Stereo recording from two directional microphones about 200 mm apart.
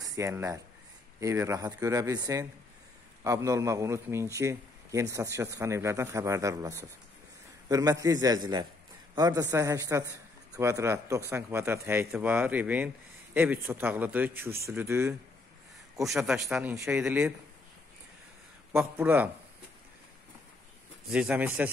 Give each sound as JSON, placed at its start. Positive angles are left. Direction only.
{"t": 0.0, "sound": "a man's voice", "side_deg": -15}
{"t": 18.7, "sound": "a man's voice", "side_deg": -10}
{"t": 21.1, "sound": "a man's voice", "side_deg": -5}